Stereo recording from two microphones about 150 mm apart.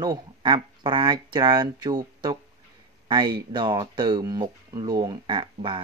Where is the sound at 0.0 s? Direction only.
30° right (ahead or behind).